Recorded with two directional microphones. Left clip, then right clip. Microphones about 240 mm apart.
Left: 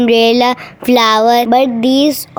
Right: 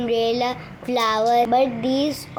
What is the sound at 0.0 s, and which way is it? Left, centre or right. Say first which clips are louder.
A woman's voice: left 11 dB; left.